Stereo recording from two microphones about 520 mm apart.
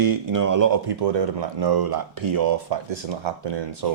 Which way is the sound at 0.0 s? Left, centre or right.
Right.